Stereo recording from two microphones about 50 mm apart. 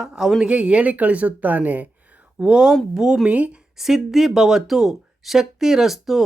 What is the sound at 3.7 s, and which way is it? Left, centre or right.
Speech, centre.